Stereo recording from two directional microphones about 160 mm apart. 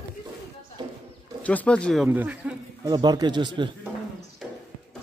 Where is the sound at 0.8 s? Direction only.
30° right (ahead or behind).